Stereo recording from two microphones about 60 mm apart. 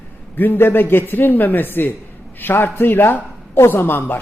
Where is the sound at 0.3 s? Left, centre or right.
Left.